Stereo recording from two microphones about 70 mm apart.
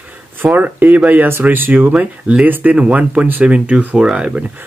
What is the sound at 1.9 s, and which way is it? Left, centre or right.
Speech, centre.